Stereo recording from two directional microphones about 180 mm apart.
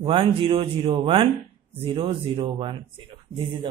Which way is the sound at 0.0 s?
30° right (ahead or behind).